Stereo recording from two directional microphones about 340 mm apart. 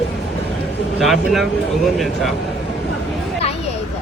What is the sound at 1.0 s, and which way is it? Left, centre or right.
Speech, centre.